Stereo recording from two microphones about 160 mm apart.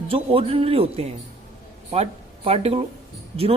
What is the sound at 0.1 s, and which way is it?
Speech, 35° right (ahead or behind).